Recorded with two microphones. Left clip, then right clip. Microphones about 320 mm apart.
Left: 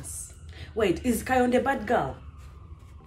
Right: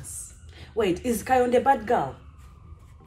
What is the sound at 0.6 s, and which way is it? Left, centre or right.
A woman's voice, centre.